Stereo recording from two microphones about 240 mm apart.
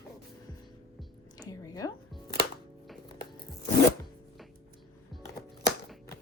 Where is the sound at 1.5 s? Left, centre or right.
Centre.